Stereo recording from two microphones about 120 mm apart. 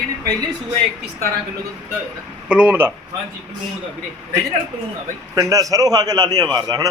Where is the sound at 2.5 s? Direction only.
10° right (ahead or behind).